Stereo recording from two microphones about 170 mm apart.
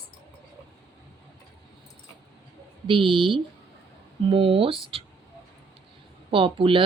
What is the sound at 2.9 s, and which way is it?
Speech, 30° right (ahead or behind).